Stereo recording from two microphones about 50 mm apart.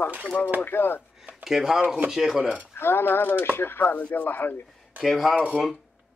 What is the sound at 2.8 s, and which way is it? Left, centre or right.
A man's voice, left.